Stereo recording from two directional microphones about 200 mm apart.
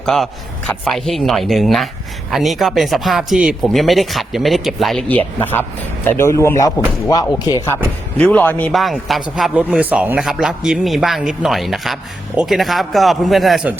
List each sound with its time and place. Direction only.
0.0 s a man's voice: centre (ahead or behind); by 7.7 s 20° left (ahead or behind)
8.2 s speech: 5° left (ahead or behind)